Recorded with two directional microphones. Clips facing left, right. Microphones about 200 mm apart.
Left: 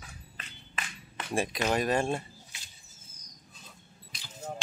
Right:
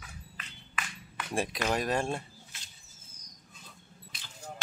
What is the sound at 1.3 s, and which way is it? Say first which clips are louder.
Speech: left 2 dB; centre (ahead or behind).